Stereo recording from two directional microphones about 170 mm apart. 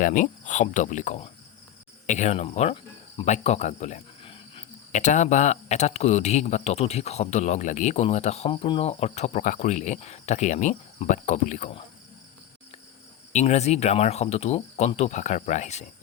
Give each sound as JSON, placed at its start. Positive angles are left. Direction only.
{"t": 0.0, "sound": "speech", "side_deg": 50}
{"t": 4.9, "sound": "speech", "side_deg": 45}
{"t": 13.3, "sound": "speech", "side_deg": 40}